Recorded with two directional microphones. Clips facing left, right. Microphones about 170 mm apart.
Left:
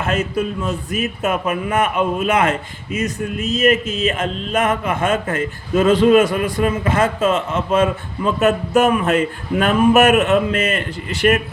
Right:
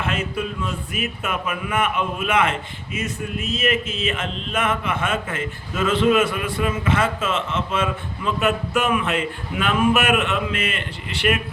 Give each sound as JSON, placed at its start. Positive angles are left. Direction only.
{"t": 0.0, "sound": "speech", "side_deg": 40}